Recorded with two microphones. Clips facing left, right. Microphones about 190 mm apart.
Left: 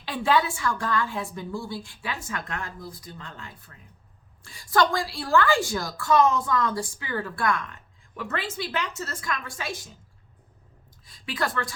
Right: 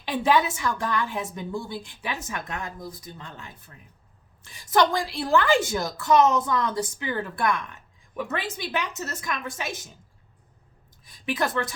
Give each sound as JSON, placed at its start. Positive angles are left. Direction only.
{"t": 0.0, "sound": "a woman's voice", "side_deg": -20}
{"t": 11.0, "sound": "a woman's voice", "side_deg": -20}